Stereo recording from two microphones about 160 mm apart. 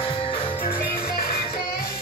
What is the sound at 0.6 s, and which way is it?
Music, 65° left (ahead or behind).